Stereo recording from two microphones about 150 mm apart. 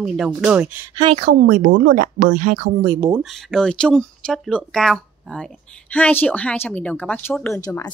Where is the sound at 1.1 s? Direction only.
55° right (ahead or behind).